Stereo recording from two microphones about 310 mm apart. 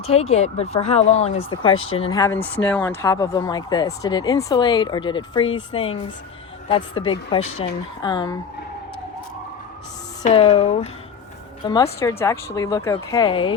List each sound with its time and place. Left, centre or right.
0.0 s speech: centre
10.2 s speech: left